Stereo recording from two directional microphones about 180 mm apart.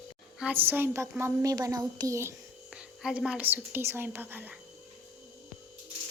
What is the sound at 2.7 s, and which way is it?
A child's voice, 5° right (ahead or behind).